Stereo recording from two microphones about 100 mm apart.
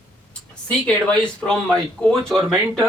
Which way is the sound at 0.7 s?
10° left (ahead or behind).